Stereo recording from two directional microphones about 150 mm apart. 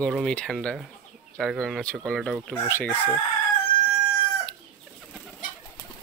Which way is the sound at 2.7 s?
15° left (ahead or behind).